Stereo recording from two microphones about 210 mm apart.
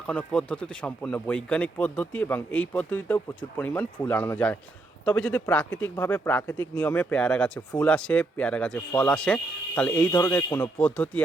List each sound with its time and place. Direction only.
0.1 s speech: 5° left (ahead or behind)